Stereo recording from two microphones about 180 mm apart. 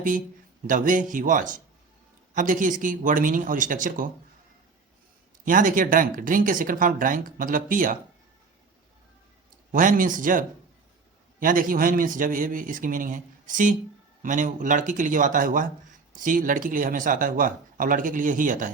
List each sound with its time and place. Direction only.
0.7 s speech: 45° right (ahead or behind)
5.5 s speech: 50° right (ahead or behind)
9.7 s speech: 50° right (ahead or behind)